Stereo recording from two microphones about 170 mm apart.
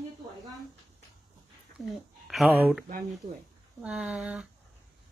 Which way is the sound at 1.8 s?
Centre (ahead or behind).